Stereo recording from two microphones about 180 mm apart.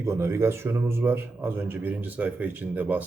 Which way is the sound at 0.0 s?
15° right (ahead or behind).